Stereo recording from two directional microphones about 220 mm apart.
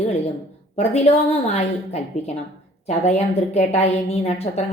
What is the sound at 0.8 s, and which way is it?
A woman's voice, 30° left (ahead or behind).